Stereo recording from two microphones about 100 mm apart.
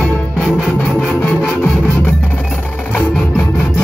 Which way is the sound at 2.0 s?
15° left (ahead or behind).